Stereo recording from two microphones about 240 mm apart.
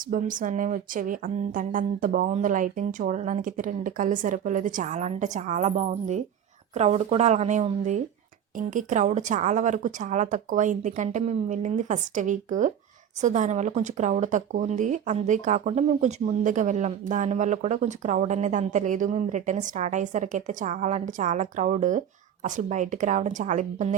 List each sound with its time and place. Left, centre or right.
0.1 s speech: right